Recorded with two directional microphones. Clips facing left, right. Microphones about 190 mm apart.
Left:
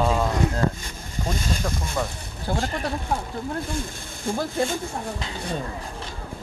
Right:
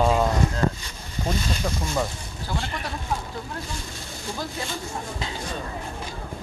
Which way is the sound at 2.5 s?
45° left (ahead or behind).